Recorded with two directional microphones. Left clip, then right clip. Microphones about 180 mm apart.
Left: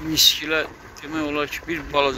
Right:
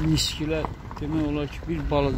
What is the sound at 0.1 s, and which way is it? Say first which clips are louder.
Speech: left 12 dB; 10° right (ahead or behind).